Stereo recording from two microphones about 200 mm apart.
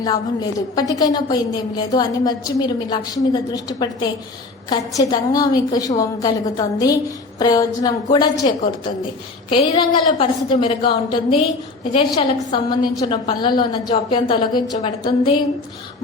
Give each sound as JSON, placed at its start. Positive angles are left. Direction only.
{"t": 0.0, "sound": "a woman's voice", "side_deg": 20}